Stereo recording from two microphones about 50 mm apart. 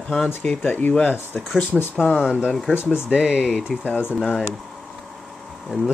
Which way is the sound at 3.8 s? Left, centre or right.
Left.